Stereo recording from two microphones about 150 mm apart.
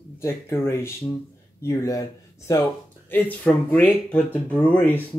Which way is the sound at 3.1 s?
10° left (ahead or behind).